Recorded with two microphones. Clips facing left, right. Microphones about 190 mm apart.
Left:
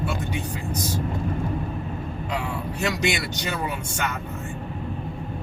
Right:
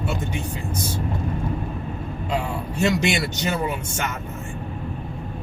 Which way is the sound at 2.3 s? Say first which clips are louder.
Right 4 dB; 25° right (ahead or behind).